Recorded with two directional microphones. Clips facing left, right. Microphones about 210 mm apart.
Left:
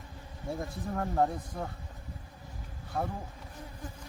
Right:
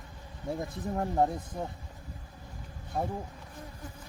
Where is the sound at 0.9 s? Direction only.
15° right (ahead or behind).